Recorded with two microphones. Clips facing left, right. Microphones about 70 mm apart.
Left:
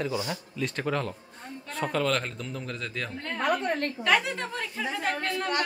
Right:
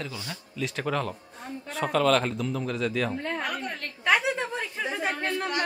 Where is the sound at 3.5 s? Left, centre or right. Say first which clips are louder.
Left 7 dB; left.